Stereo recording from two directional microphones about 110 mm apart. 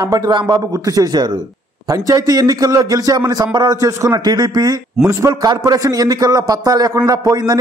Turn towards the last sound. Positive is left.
turn(degrees=-35)  # may be behind; listen again after turning